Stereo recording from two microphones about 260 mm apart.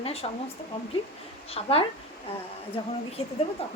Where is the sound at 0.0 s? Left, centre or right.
Left.